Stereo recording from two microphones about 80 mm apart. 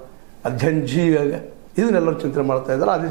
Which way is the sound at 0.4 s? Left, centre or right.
Right.